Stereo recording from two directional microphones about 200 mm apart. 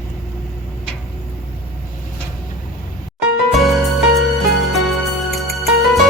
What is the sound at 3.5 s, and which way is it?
Music, centre (ahead or behind).